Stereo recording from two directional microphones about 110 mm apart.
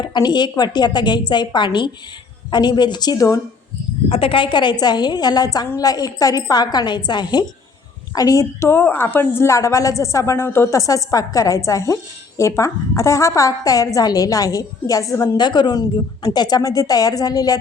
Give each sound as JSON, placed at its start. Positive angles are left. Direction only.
{"t": 0.0, "sound": "a woman's voice", "side_deg": 40}
{"t": 4.1, "sound": "a woman's voice", "side_deg": 55}
{"t": 8.7, "sound": "a woman's voice", "side_deg": 20}
{"t": 15.4, "sound": "a woman's voice", "side_deg": 40}